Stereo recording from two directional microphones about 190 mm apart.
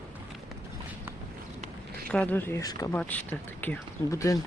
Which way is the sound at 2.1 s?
5° left (ahead or behind).